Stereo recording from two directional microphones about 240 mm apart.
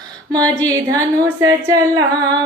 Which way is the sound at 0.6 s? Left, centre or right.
Centre.